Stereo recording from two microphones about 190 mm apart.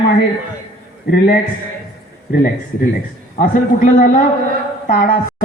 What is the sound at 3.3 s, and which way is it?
A man's voice, 45° left (ahead or behind).